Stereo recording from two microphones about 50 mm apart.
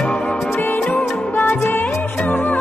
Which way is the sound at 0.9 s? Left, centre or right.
Left.